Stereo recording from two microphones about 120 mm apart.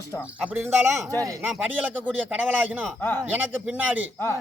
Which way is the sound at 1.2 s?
25° right (ahead or behind).